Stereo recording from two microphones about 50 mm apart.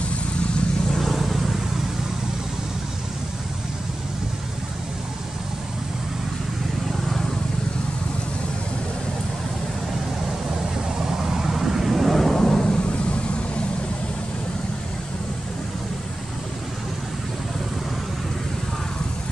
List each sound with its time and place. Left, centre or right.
0.9 s vehicle: centre
11.0 s vehicle: centre
12.6 s vehicle: left